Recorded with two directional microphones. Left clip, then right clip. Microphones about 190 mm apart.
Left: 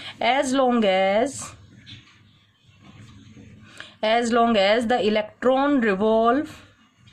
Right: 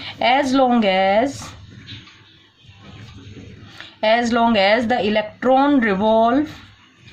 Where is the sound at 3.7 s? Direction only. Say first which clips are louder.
Right 4 dB; 40° left (ahead or behind).